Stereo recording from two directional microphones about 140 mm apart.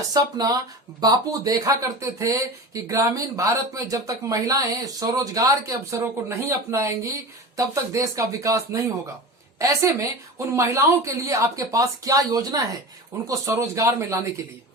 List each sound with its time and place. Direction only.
0.1 s speech: 25° right (ahead or behind)